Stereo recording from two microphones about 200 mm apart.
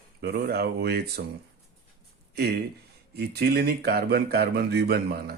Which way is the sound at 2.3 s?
50° right (ahead or behind).